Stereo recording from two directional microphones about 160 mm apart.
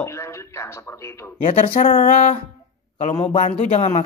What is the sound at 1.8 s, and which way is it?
Speech, 55° left (ahead or behind).